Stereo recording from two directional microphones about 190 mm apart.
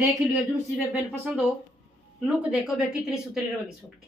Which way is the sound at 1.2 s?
10° right (ahead or behind).